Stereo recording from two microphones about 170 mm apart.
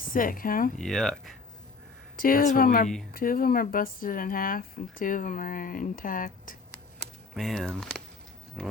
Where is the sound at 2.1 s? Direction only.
55° left (ahead or behind).